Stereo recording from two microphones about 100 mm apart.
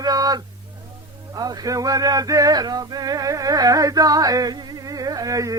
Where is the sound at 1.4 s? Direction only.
40° right (ahead or behind).